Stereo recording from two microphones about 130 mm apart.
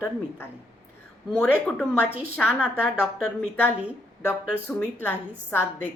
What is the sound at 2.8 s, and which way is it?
Speech, 5° left (ahead or behind).